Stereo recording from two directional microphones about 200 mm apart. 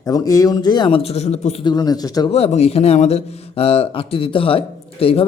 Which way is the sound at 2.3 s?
30° left (ahead or behind).